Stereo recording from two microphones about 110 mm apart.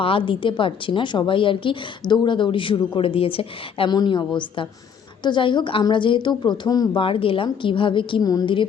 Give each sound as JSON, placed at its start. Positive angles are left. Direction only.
{"t": 0.0, "sound": "a woman's voice", "side_deg": 50}
{"t": 3.8, "sound": "a woman's voice", "side_deg": 45}
{"t": 7.0, "sound": "a woman's voice", "side_deg": 55}
{"t": 8.2, "sound": "a woman's voice", "side_deg": 35}